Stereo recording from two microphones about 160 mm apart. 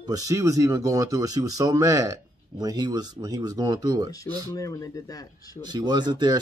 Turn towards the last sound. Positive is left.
turn(degrees=-25)  # may be behind; listen again after turning